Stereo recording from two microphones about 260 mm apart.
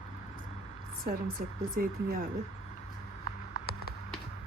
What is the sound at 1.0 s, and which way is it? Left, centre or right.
A woman's voice, right.